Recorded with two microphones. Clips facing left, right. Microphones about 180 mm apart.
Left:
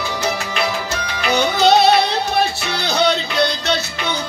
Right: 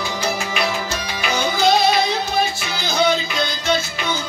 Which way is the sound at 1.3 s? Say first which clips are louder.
Left 3 dB; 70° left (ahead or behind).